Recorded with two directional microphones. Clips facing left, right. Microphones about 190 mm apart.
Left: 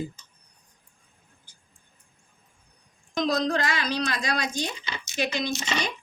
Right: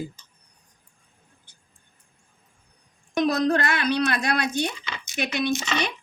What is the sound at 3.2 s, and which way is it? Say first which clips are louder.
A woman's voice: right 3 dB; 65° right (ahead or behind).